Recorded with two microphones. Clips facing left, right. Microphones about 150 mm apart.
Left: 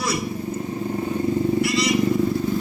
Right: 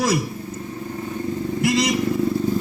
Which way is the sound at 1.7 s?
50° right (ahead or behind).